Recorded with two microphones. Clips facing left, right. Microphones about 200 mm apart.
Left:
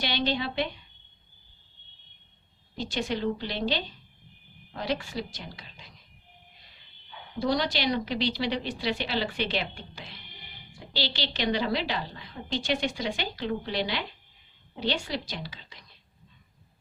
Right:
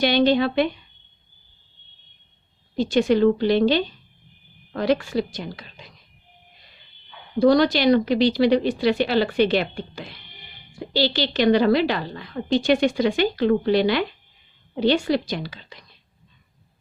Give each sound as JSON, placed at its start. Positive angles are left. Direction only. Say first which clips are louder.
{"t": 0.0, "sound": "a woman's voice", "louder": "right 11 dB", "side_deg": -50}
{"t": 2.7, "sound": "a woman's voice", "louder": "right 12 dB", "side_deg": -55}
{"t": 7.3, "sound": "a woman's voice", "louder": "right 11 dB", "side_deg": -50}